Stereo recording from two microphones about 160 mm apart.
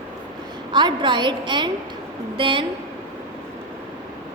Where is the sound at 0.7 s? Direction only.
30° right (ahead or behind).